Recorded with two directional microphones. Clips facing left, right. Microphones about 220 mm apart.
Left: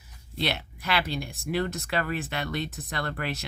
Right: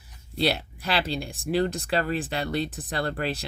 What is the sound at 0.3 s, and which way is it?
Speech, 35° right (ahead or behind).